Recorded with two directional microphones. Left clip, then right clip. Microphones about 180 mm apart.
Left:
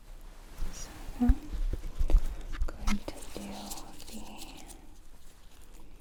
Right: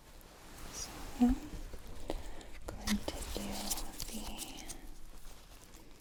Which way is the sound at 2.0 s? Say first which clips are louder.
Even; centre (ahead or behind).